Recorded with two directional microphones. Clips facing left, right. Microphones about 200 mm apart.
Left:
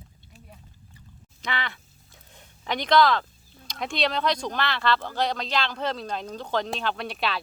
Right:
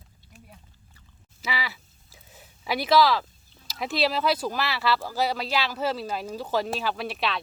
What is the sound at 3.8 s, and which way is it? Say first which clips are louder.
Speech: right 1 dB; 5° right (ahead or behind).